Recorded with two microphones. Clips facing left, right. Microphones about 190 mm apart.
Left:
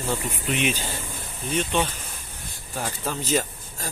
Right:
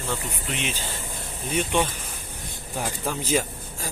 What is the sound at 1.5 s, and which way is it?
Speech, 10° right (ahead or behind).